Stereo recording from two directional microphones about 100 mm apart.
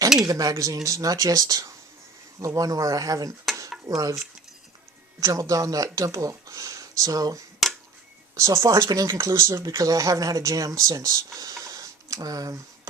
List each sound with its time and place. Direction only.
0.3 s speech: 35° right (ahead or behind)
5.2 s speech: 35° right (ahead or behind)